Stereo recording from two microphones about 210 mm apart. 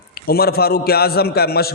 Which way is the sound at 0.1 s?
45° left (ahead or behind).